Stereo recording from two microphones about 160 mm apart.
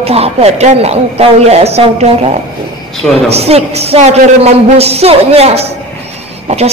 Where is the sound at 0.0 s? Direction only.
40° right (ahead or behind).